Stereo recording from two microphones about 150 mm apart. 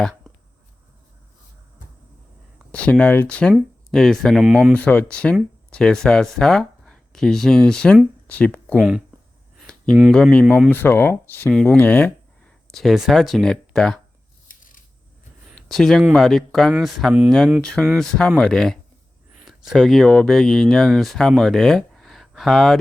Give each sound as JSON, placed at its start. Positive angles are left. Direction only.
{"t": 2.7, "sound": "speech", "side_deg": 10}
{"t": 4.8, "sound": "speech", "side_deg": 10}
{"t": 10.1, "sound": "speech", "side_deg": 5}
{"t": 12.7, "sound": "speech", "side_deg": 0}
{"t": 14.4, "sound": "coin", "side_deg": 65}
{"t": 15.7, "sound": "speech", "side_deg": 0}